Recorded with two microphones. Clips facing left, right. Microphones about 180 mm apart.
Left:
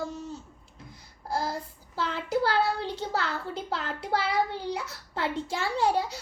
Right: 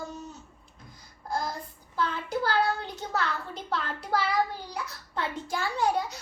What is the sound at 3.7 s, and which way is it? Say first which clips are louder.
A child's voice: right 1 dB; 25° left (ahead or behind).